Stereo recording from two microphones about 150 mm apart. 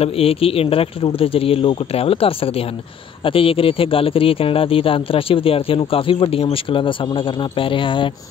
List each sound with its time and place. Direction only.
0.0 s a man's voice: 40° left (ahead or behind)